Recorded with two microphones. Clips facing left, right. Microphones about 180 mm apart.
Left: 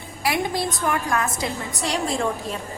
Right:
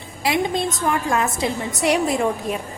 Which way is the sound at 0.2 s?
20° right (ahead or behind).